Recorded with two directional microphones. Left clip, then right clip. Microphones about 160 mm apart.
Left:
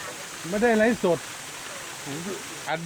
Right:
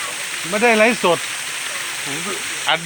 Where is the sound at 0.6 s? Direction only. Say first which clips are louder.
Right 7 dB; centre (ahead or behind).